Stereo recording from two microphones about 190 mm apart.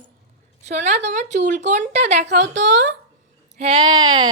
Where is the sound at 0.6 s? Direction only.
40° right (ahead or behind).